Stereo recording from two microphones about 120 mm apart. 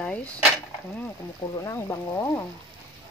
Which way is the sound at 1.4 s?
30° left (ahead or behind).